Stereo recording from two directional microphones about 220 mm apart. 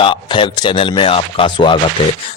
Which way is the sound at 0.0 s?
20° left (ahead or behind).